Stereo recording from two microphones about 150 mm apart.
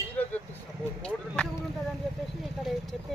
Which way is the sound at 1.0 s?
5° left (ahead or behind).